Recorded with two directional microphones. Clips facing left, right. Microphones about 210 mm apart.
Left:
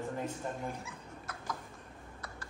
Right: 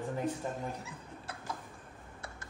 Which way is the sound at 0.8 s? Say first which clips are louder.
Even; 30° right (ahead or behind).